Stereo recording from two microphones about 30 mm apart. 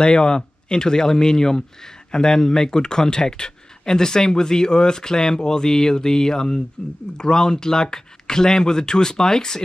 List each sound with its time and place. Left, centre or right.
0.0 s speech: left